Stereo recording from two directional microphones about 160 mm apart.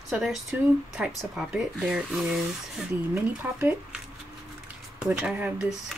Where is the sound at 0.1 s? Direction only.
Centre (ahead or behind).